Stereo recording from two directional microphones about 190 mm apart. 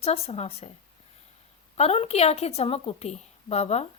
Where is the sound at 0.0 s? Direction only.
35° left (ahead or behind).